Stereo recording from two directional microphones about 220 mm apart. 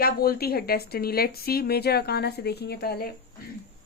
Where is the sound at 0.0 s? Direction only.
45° left (ahead or behind).